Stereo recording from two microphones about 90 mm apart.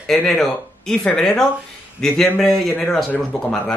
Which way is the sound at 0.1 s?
5° left (ahead or behind).